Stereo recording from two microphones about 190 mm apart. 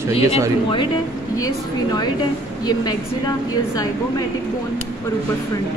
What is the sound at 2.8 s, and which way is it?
A woman's voice, 20° left (ahead or behind).